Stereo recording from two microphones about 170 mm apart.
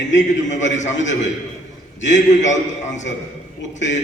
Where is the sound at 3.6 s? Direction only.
90° left.